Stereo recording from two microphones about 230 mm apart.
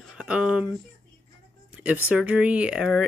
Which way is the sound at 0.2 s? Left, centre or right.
Centre.